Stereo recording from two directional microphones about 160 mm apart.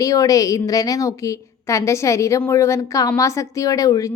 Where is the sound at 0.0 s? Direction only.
20° left (ahead or behind).